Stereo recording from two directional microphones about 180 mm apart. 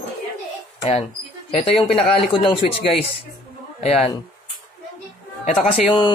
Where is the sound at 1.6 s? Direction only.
30° left (ahead or behind).